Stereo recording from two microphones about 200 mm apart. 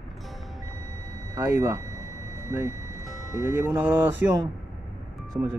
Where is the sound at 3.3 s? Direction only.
10° right (ahead or behind).